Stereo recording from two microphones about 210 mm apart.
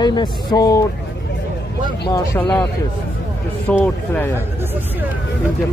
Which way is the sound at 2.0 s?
20° left (ahead or behind).